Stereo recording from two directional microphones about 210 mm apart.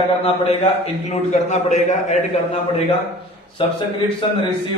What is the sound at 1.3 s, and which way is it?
A man's voice, 30° left (ahead or behind).